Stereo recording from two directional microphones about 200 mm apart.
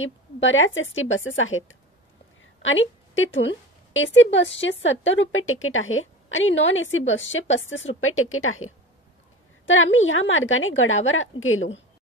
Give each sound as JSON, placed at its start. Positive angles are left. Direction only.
{"t": 0.0, "sound": "a woman's voice", "side_deg": 75}
{"t": 8.0, "sound": "speech", "side_deg": 90}
{"t": 9.7, "sound": "a woman's voice", "side_deg": 75}